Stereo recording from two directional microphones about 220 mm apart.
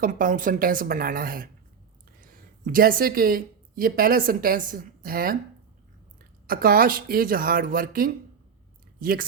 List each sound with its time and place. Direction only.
0.0 s speech: 35° right (ahead or behind)
6.5 s speech: 40° right (ahead or behind)